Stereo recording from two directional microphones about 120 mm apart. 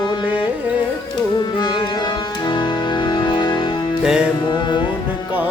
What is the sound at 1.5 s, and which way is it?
Music, 40° left (ahead or behind).